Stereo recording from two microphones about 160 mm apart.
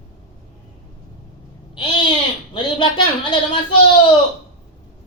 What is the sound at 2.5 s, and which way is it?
Speech, 30° left (ahead or behind).